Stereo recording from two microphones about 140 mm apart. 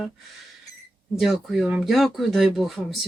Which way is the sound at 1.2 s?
Centre (ahead or behind).